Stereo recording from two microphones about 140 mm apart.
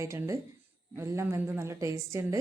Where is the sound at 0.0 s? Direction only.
20° right (ahead or behind).